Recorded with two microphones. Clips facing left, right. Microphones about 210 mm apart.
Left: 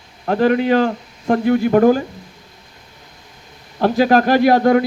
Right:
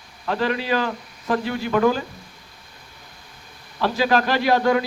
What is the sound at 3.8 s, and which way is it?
Speech, 50° left (ahead or behind).